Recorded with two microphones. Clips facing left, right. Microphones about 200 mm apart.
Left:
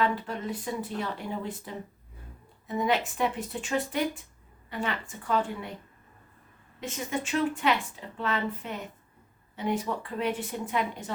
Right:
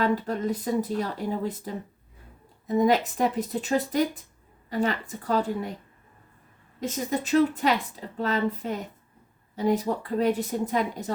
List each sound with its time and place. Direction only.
0.0 s a woman's voice: 40° right (ahead or behind)
6.7 s a woman's voice: 40° right (ahead or behind)